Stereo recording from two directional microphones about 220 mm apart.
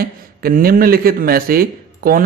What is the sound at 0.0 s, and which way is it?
Speech, 40° right (ahead or behind).